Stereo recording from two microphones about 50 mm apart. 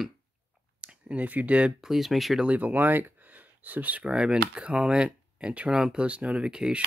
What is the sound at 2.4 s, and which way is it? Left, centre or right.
Speech, right.